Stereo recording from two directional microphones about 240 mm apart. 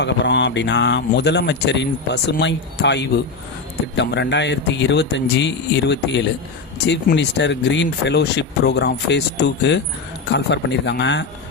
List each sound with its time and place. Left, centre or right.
0.0 s speech: left